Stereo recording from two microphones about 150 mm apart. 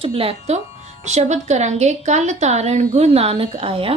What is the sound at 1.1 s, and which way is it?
A woman's voice, 50° right (ahead or behind).